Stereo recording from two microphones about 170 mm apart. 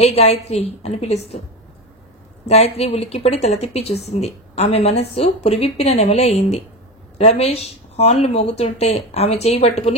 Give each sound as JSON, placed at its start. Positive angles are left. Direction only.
{"t": 0.0, "sound": "speech", "side_deg": 40}
{"t": 2.4, "sound": "speech", "side_deg": 40}